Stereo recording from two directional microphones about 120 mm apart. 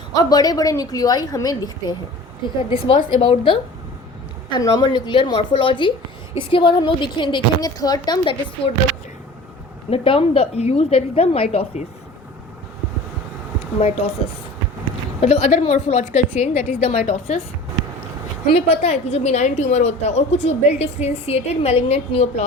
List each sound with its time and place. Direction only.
0.1 s a woman's voice: 30° left (ahead or behind)
2.6 s a woman's voice: 45° left (ahead or behind)
9.9 s a woman's voice: 50° left (ahead or behind)
15.2 s a woman's voice: 65° left (ahead or behind)
18.5 s a woman's voice: 60° left (ahead or behind)